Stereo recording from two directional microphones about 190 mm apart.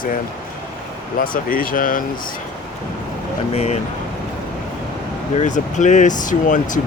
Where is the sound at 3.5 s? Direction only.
35° left (ahead or behind).